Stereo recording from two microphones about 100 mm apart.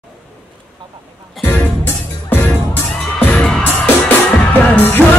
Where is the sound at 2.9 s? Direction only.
10° left (ahead or behind).